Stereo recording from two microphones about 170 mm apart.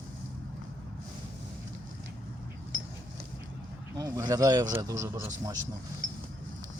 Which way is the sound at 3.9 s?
20° right (ahead or behind).